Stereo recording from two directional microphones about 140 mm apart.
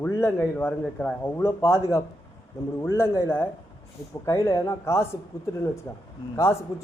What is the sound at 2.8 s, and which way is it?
A man's voice, 15° left (ahead or behind).